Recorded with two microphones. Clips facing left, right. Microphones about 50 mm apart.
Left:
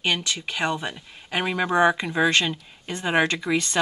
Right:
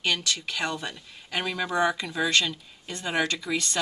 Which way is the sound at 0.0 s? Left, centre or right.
Left.